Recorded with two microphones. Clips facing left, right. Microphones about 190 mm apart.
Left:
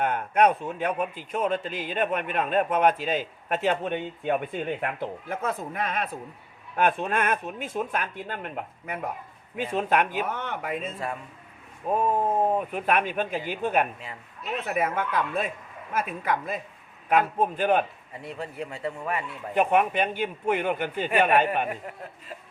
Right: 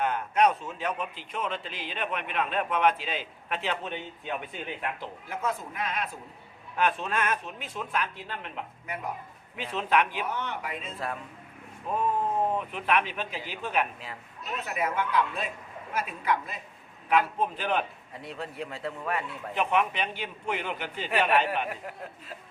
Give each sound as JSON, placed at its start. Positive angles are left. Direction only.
{"t": 0.0, "sound": "a man's voice", "side_deg": 55}
{"t": 11.9, "sound": "a man's voice", "side_deg": 45}
{"t": 18.2, "sound": "a man's voice", "side_deg": 0}
{"t": 19.5, "sound": "a man's voice", "side_deg": 50}
{"t": 21.7, "sound": "a man's voice", "side_deg": 0}